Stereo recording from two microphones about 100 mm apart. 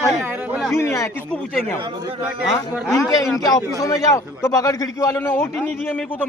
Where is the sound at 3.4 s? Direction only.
35° left (ahead or behind).